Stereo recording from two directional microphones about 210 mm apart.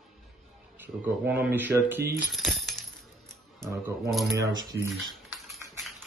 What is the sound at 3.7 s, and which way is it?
Speech, 10° right (ahead or behind).